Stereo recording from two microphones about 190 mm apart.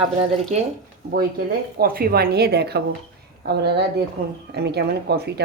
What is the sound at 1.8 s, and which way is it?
Speech, 55° right (ahead or behind).